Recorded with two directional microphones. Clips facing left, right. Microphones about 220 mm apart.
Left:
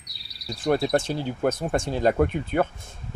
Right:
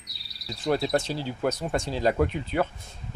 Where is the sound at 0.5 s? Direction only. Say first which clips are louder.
Left 3 dB; 50° left (ahead or behind).